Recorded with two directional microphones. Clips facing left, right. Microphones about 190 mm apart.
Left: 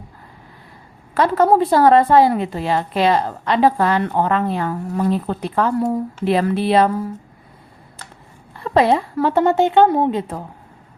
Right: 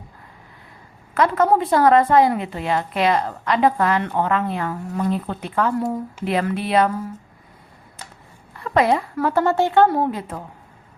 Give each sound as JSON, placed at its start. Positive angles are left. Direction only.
{"t": 1.1, "sound": "a woman's voice", "side_deg": 35}
{"t": 8.5, "sound": "a woman's voice", "side_deg": 30}